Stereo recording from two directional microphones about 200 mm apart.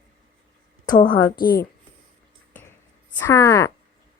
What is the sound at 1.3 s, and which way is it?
Speech, 45° left (ahead or behind).